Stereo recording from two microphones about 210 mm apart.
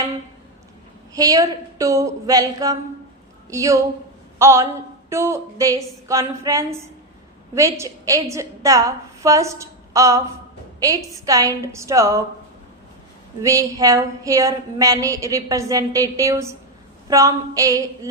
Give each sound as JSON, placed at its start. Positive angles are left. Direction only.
{"t": 1.1, "sound": "a woman's voice", "side_deg": -15}
{"t": 13.4, "sound": "a woman's voice", "side_deg": -15}